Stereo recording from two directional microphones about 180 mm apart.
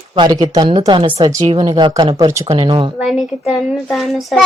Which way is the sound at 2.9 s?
5° right (ahead or behind).